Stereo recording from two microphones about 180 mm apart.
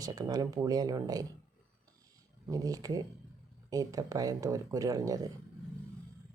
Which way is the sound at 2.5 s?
20° right (ahead or behind).